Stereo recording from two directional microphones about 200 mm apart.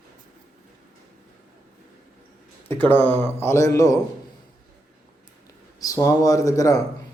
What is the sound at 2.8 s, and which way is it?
Speech, 10° left (ahead or behind).